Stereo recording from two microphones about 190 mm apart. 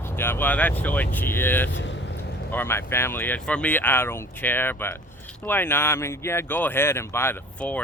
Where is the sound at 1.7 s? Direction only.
70° left (ahead or behind).